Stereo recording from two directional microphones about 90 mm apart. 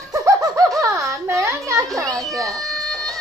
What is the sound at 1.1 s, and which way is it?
Child singing, 30° right (ahead or behind).